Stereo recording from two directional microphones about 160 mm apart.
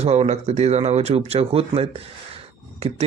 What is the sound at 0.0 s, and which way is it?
A man's voice, 40° right (ahead or behind).